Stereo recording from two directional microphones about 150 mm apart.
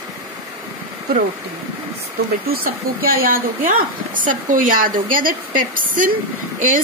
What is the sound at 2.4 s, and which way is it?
Speech, 85° right.